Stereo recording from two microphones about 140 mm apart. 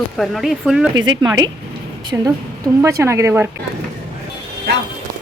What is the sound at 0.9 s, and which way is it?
A woman's voice, 30° right (ahead or behind).